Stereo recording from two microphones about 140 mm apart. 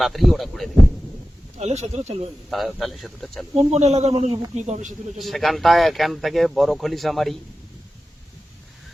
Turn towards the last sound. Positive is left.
turn(degrees=0)  # may be behind; listen again after turning